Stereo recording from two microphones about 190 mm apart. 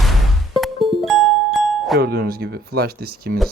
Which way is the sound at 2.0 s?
55° right (ahead or behind).